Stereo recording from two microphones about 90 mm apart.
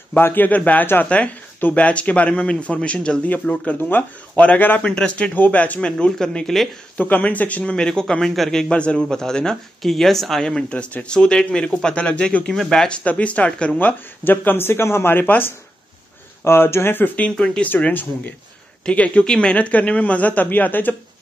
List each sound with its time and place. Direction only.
0.1 s speech: 20° left (ahead or behind); by 6.7 s 5° left (ahead or behind)
7.0 s speech: 20° left (ahead or behind)